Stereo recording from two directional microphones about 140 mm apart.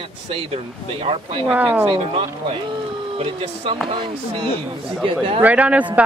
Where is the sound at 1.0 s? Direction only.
40° right (ahead or behind).